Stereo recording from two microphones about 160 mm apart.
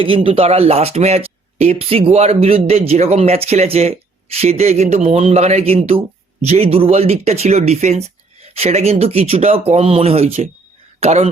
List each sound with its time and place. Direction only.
0.0 s speech: 35° right (ahead or behind)